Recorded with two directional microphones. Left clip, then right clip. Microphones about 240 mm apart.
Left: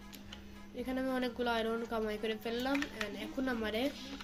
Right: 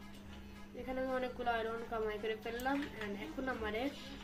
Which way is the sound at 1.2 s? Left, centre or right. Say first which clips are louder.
Left 3 dB; left.